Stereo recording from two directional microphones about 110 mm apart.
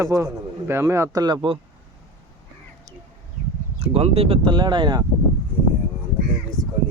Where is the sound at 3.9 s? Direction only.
65° right (ahead or behind); by 5.0 s 40° right (ahead or behind).